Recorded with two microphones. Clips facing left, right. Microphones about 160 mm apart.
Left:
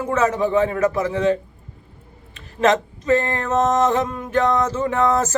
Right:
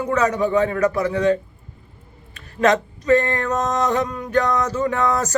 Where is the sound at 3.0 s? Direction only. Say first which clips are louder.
Right 5 dB; 25° left (ahead or behind).